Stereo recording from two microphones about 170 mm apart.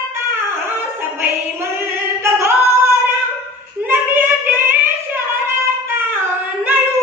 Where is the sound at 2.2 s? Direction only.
15° right (ahead or behind).